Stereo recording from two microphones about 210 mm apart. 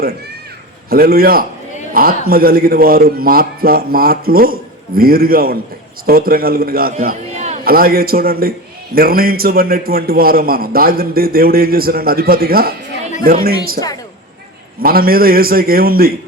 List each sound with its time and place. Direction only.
0.9 s a man's voice: 45° right (ahead or behind)
14.8 s a man's voice: 45° right (ahead or behind)